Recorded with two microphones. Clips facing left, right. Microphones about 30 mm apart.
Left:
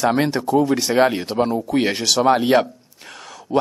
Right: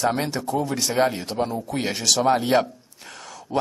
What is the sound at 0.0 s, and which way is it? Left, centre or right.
Speech, left.